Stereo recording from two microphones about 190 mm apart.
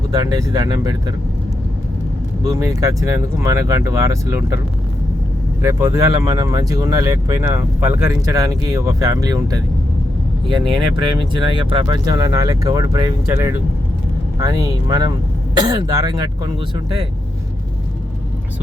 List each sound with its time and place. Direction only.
0.1 s speech: 20° right (ahead or behind)
2.4 s speech: 20° right (ahead or behind)
5.6 s speech: 15° right (ahead or behind)